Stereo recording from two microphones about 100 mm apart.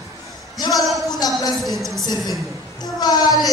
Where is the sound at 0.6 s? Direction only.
35° left (ahead or behind).